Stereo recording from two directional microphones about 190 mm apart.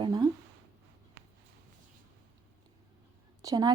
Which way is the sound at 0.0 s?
20° right (ahead or behind).